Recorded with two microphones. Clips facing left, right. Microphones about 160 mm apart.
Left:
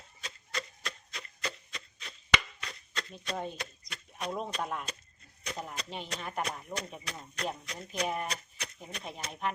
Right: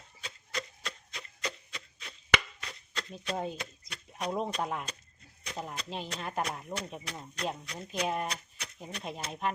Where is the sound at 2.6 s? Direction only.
15° right (ahead or behind).